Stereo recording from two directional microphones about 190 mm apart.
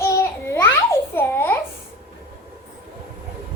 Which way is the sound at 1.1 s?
10° left (ahead or behind).